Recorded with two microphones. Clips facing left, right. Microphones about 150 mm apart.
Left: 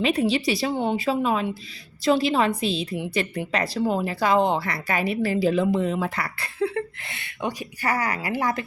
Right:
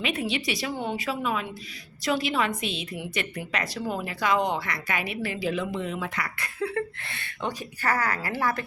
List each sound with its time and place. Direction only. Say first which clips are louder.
0.0 s a woman's voice: left 7 dB; 35° left (ahead or behind)
6.7 s a woman's voice: left 1 dB; 20° left (ahead or behind)